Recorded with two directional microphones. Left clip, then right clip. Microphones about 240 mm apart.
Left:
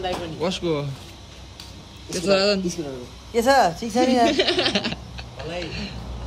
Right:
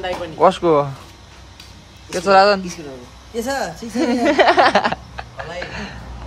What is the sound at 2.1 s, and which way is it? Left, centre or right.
Speech, centre.